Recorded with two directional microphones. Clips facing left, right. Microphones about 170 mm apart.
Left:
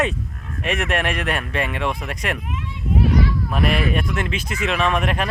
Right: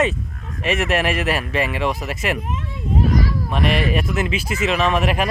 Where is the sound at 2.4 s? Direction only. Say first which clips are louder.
Right 2 dB; 40° right (ahead or behind).